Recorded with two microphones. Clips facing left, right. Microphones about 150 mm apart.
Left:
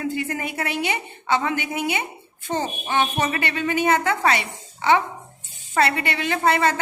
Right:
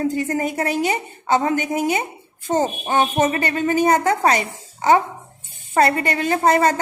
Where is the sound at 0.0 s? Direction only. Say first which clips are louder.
Right 5 dB; 40° right (ahead or behind).